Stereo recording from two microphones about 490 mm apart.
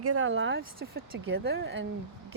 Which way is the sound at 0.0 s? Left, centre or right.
Right.